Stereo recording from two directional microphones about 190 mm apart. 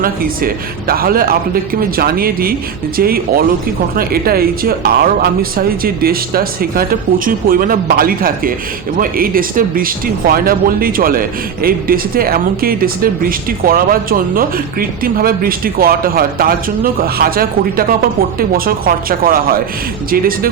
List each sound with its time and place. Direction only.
0.0 s speech: 50° right (ahead or behind)